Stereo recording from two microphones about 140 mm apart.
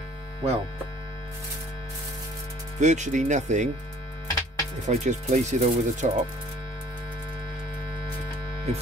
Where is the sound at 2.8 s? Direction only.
60° right (ahead or behind).